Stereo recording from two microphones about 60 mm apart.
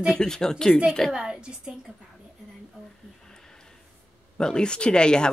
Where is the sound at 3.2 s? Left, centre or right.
Centre.